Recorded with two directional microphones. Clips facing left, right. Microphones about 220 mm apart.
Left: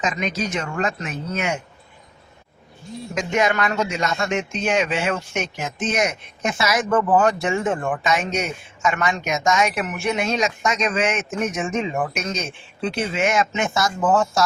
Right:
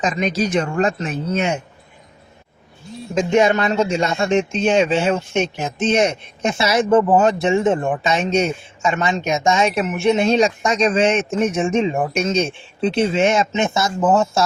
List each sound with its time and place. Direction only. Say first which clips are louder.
0.0 s speech: right 5 dB; 35° right (ahead or behind)
3.2 s speech: right 6 dB; 30° right (ahead or behind)